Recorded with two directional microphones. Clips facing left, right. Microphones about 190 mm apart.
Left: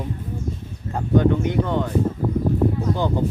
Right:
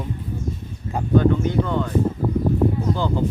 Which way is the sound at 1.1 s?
20° left (ahead or behind).